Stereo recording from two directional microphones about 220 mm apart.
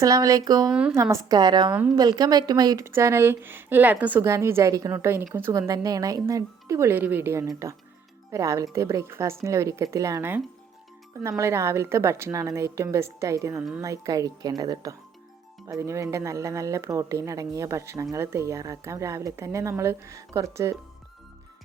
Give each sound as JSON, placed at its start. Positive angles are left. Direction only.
{"t": 0.0, "sound": "a woman's voice", "side_deg": -15}
{"t": 0.7, "sound": "a woman's voice", "side_deg": -5}